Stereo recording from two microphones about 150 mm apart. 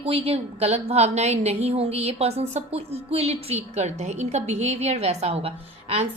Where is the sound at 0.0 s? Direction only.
40° right (ahead or behind).